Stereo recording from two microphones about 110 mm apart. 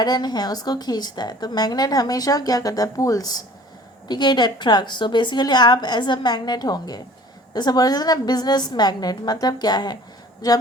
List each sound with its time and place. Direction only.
0.0 s a woman's voice: 40° left (ahead or behind)